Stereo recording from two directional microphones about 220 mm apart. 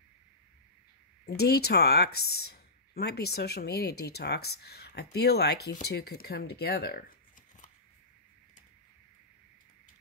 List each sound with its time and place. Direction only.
1.2 s speech: 45° left (ahead or behind)